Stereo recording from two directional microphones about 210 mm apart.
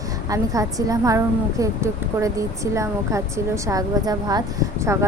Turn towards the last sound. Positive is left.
turn(degrees=-15)  # may be behind; listen again after turning